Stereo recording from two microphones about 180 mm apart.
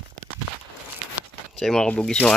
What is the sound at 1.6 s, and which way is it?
Speech, 5° left (ahead or behind).